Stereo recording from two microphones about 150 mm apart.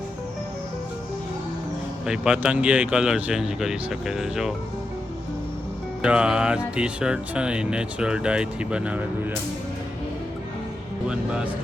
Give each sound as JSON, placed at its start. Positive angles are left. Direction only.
{"t": 2.0, "sound": "speech", "side_deg": -5}
{"t": 6.0, "sound": "speech", "side_deg": -5}
{"t": 11.1, "sound": "speech", "side_deg": -5}